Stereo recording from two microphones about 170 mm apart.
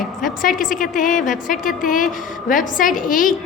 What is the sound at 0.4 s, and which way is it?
A woman's voice, 55° left (ahead or behind).